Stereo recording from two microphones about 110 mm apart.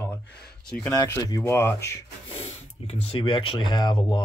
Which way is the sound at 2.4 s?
70° left (ahead or behind).